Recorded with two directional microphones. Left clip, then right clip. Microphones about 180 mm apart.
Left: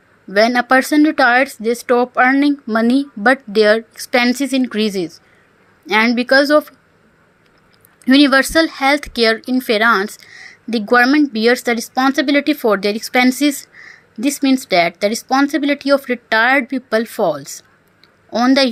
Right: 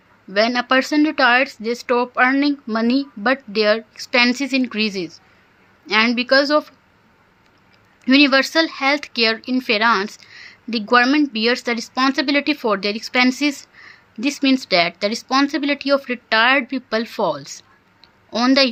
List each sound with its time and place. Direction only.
0.3 s speech: 25° left (ahead or behind)
8.0 s speech: 25° left (ahead or behind)